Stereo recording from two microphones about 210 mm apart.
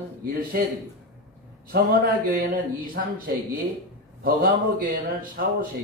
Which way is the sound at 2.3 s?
40° right (ahead or behind).